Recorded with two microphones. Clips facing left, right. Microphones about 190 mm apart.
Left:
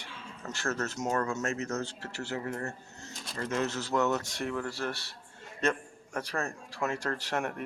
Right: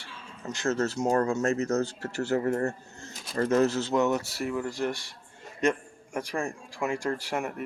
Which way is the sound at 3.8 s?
20° right (ahead or behind).